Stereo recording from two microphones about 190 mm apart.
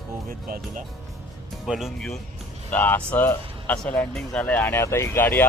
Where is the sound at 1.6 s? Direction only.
Centre (ahead or behind).